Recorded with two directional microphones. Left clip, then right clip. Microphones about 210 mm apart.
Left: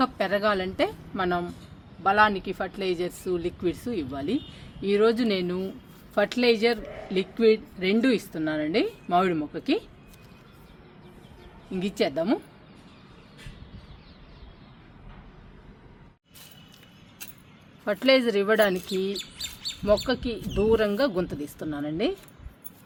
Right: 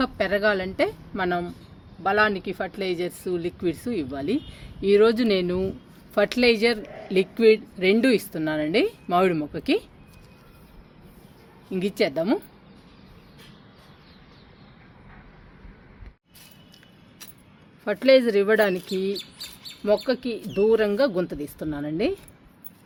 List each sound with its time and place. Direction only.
0.0 s speech: 35° right (ahead or behind)
11.7 s speech: 40° right (ahead or behind)
17.8 s speech: 30° right (ahead or behind)